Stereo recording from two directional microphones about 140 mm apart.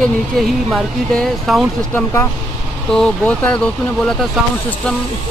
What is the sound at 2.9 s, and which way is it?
Speech, 10° left (ahead or behind).